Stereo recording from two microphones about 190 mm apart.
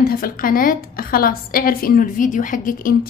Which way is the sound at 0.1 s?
50° left (ahead or behind).